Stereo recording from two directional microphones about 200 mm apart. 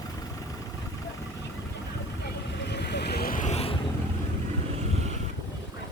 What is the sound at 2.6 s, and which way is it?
Vehicle, 55° left (ahead or behind).